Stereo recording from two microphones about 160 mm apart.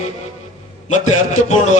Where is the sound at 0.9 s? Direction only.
50° left (ahead or behind).